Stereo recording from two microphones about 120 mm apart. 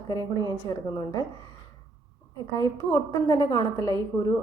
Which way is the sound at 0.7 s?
30° left (ahead or behind).